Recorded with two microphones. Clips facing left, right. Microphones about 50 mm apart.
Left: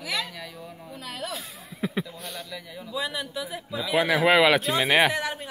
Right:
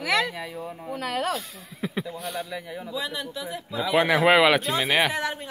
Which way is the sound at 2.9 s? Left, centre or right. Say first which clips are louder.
Left 2 dB; centre.